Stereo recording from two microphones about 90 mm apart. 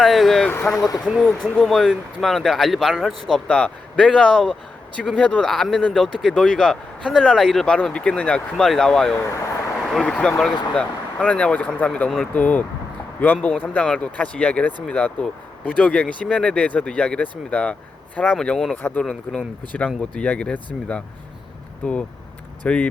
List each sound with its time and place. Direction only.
0.0 s speech: centre (ahead or behind)
18.8 s speech: 20° left (ahead or behind)
21.8 s speech: 15° left (ahead or behind)